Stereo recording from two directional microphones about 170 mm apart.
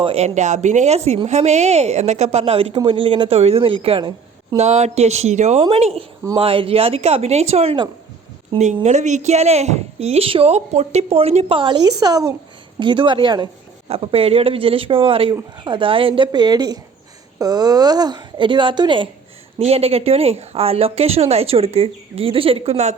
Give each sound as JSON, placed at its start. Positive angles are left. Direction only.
{"t": 0.0, "sound": "a woman's voice", "side_deg": -35}